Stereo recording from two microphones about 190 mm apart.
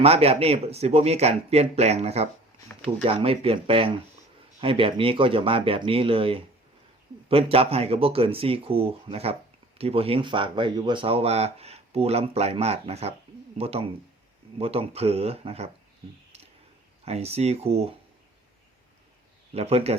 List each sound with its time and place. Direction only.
0.0 s speech: 30° right (ahead or behind)
17.1 s speech: 35° right (ahead or behind)
19.5 s speech: 35° right (ahead or behind)